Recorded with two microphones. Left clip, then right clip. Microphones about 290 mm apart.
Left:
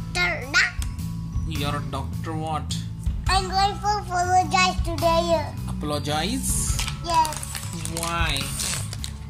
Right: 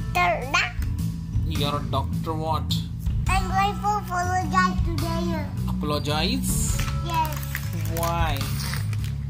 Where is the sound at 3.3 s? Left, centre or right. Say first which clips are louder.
Left 2 dB; centre.